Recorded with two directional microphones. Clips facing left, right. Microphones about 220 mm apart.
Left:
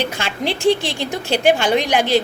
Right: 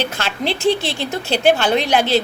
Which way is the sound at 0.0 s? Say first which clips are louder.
Even; 15° left (ahead or behind).